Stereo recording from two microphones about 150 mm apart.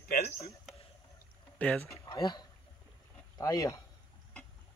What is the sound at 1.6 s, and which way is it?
Speech, 10° left (ahead or behind).